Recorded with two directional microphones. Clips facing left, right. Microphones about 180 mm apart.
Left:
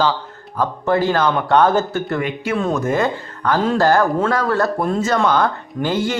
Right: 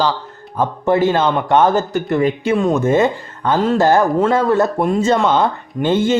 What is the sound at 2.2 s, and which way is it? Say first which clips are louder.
Speech: right 6 dB; 35° right (ahead or behind).